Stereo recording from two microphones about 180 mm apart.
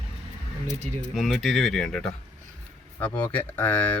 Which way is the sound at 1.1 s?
Centre (ahead or behind).